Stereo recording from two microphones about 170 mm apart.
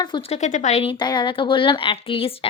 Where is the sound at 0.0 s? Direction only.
25° left (ahead or behind).